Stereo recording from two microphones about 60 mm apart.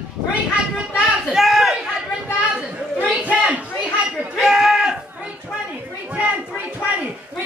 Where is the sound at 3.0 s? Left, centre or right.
Right.